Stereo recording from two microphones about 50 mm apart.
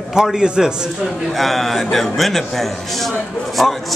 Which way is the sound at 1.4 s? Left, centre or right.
Centre.